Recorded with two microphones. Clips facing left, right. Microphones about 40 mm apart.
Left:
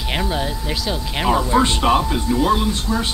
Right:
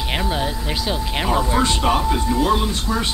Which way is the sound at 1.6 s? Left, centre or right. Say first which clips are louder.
Left 2 dB; centre.